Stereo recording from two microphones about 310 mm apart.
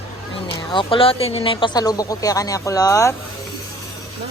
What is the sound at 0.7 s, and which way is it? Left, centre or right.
Speech, centre.